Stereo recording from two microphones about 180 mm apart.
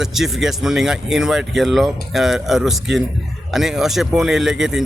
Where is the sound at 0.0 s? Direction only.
Centre (ahead or behind).